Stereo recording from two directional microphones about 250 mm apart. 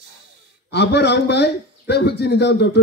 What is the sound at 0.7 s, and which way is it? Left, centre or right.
A man's voice, left.